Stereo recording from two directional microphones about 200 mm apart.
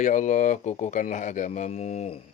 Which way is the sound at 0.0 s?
40° left (ahead or behind).